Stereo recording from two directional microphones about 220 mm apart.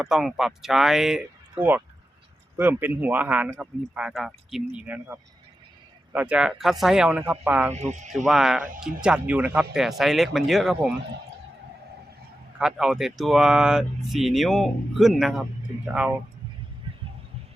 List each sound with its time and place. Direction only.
0.0 s speech: centre (ahead or behind)
7.7 s speech: 30° right (ahead or behind)
8.1 s speech: centre (ahead or behind)
12.5 s speech: centre (ahead or behind)